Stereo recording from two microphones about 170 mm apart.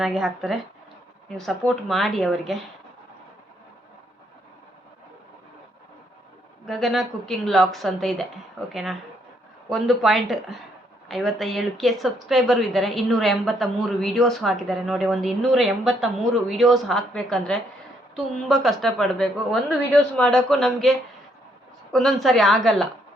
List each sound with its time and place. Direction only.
0.0 s a woman's voice: 5° right (ahead or behind)
6.7 s a woman's voice: centre (ahead or behind)